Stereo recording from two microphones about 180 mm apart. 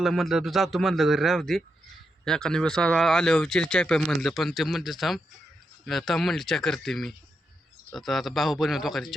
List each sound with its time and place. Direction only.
0.0 s speech: centre (ahead or behind)